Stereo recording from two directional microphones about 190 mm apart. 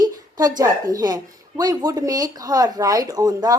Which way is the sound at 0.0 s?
20° right (ahead or behind).